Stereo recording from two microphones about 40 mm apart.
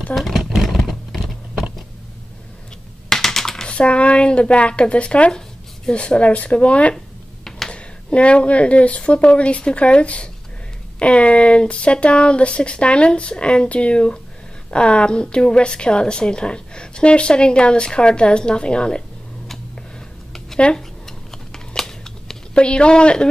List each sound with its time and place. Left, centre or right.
0.1 s speech: centre
0.6 s a sound: centre
3.1 s typing: centre
3.6 s speech: left
7.4 s a sound: centre
7.7 s speech: left
20.5 s speech: left
21.0 s a sound: centre
22.5 s speech: left